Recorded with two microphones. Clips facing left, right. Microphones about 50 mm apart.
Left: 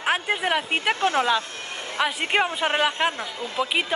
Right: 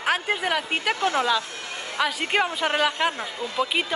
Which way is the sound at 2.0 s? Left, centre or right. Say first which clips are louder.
Left 1 dB; centre.